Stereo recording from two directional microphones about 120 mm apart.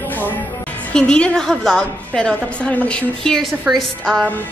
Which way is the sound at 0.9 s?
10° left (ahead or behind).